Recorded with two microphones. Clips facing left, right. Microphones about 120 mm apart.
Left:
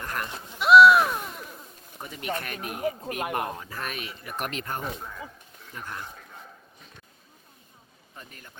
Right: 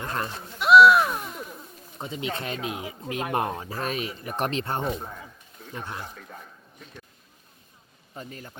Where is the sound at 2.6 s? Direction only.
55° left (ahead or behind).